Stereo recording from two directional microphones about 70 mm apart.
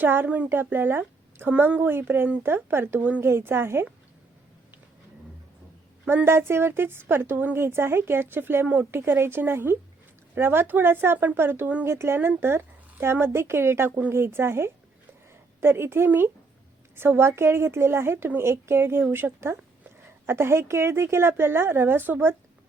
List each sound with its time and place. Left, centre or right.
0.0 s a woman's voice: right
6.2 s a woman's voice: right
8.9 s a woman's voice: right